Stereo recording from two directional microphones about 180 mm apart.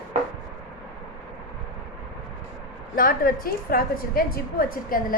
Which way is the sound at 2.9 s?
50° left (ahead or behind).